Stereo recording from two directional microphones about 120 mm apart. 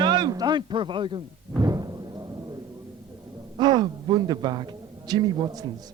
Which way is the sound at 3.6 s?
35° right (ahead or behind).